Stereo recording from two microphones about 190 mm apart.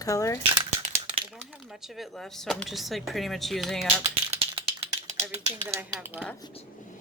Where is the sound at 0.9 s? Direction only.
30° right (ahead or behind).